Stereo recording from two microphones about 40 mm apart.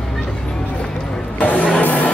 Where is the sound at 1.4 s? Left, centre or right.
Left.